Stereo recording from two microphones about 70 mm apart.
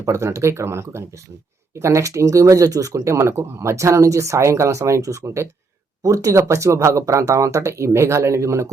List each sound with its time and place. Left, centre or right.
0.0 s speech: right